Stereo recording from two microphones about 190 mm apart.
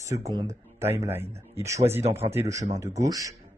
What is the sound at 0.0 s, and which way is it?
Speech, 15° right (ahead or behind).